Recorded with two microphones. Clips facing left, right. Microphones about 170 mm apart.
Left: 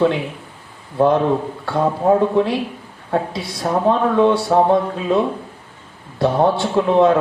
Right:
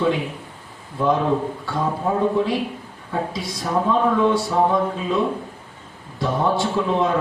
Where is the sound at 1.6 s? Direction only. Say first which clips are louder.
Left 6 dB; 65° left (ahead or behind).